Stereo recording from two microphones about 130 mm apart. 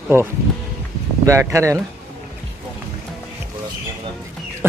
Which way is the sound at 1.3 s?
20° right (ahead or behind).